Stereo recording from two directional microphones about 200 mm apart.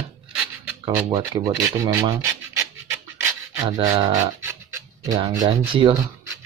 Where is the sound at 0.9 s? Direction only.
15° right (ahead or behind).